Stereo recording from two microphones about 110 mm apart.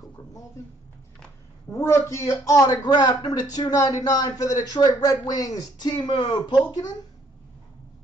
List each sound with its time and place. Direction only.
1.7 s speech: 25° left (ahead or behind); by 6.6 s 45° left (ahead or behind)